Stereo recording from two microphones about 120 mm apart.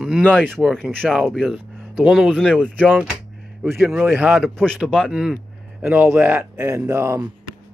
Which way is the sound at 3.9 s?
15° right (ahead or behind).